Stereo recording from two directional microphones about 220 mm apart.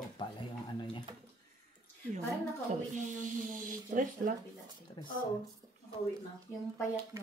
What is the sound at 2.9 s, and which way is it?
Speech, 35° right (ahead or behind).